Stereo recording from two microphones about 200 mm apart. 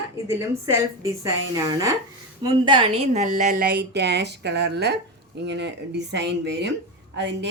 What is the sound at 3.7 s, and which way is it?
A woman's voice, 55° right (ahead or behind).